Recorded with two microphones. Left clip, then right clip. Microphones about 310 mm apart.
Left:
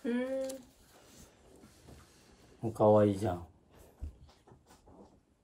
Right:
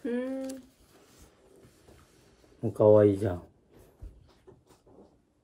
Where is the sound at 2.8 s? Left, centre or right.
Centre.